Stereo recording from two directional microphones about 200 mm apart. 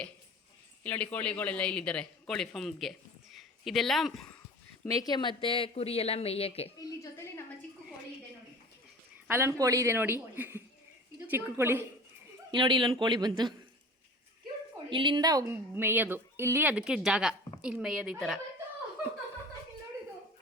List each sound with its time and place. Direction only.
0.9 s a man's voice: 10° left (ahead or behind)
4.9 s speech: 20° left (ahead or behind)
9.2 s speech: 10° right (ahead or behind)
12.5 s speech: 25° right (ahead or behind)
14.8 s a man's voice: 25° right (ahead or behind); by 18.3 s centre (ahead or behind)